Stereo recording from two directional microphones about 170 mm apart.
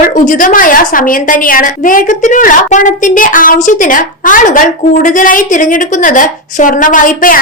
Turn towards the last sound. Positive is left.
turn(degrees=55)  # may be behind; listen again after turning